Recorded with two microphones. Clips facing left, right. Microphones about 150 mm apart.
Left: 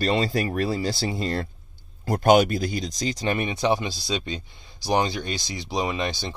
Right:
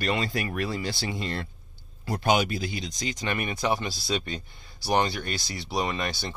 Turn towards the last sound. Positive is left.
turn(degrees=15)  # may be behind; listen again after turning